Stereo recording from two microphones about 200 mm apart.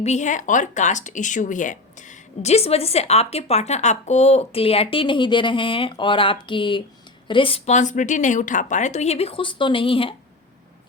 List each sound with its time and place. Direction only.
0.0 s speech: 35° left (ahead or behind)